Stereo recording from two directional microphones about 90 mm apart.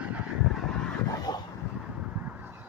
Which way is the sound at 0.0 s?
15° right (ahead or behind).